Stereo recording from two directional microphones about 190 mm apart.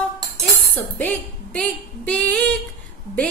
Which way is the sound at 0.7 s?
5° left (ahead or behind).